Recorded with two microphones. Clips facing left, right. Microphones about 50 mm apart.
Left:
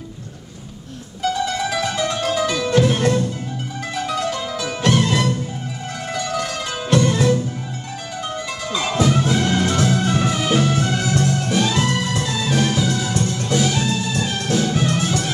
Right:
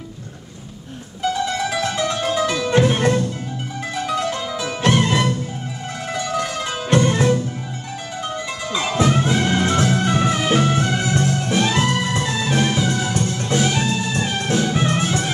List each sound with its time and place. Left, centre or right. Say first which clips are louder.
1.2 s music: even; centre
2.7 s music: even; right
3.8 s music: right 1 dB; centre
4.7 s music: right 1 dB; right
5.9 s zither: right 1 dB; centre
6.9 s music: even; right
8.2 s music: even; centre
8.9 s music: even; right
13.2 s music: left 1 dB; centre